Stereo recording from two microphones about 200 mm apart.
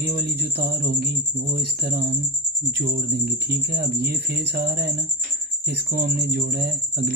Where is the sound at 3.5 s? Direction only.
50° right (ahead or behind).